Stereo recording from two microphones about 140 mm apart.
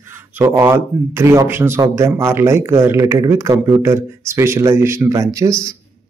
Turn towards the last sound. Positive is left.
turn(degrees=-20)  # may be behind; listen again after turning